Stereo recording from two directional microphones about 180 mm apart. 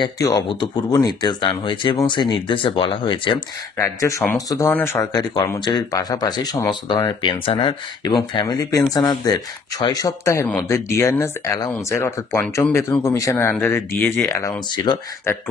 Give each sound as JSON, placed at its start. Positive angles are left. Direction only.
{"t": 0.0, "sound": "speech", "side_deg": 20}
{"t": 3.7, "sound": "speech", "side_deg": 15}
{"t": 14.9, "sound": "speech", "side_deg": 25}